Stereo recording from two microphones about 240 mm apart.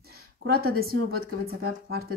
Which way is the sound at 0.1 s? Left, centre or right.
Right.